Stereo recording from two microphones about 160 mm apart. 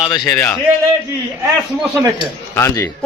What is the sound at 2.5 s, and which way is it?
Speech, 15° left (ahead or behind).